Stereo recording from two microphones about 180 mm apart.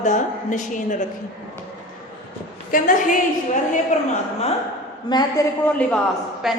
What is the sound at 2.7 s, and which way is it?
A woman's voice, 45° left (ahead or behind).